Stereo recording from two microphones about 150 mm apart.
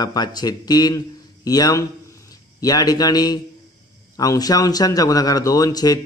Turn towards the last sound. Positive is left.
turn(degrees=25)  # may be behind; listen again after turning